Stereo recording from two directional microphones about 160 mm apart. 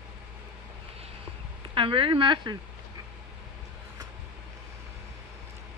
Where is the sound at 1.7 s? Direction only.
35° right (ahead or behind).